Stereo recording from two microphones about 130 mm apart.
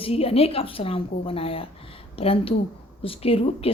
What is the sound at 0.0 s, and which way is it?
A woman's voice, 50° left (ahead or behind).